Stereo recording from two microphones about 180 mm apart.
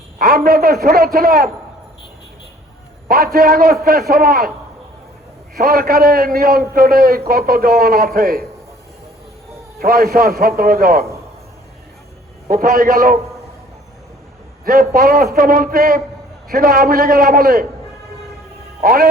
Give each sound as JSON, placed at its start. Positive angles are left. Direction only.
{"t": 0.2, "sound": "a man's voice", "side_deg": -55}
{"t": 3.3, "sound": "a man's voice", "side_deg": -55}
{"t": 5.5, "sound": "a man's voice", "side_deg": -55}
{"t": 9.7, "sound": "a man's voice", "side_deg": -55}
{"t": 12.5, "sound": "a man's voice", "side_deg": -55}
{"t": 14.6, "sound": "a man's voice", "side_deg": -55}
{"t": 18.8, "sound": "speech", "side_deg": -55}